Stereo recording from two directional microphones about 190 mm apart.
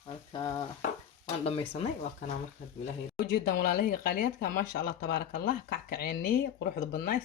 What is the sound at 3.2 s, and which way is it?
Speech, 50° left (ahead or behind).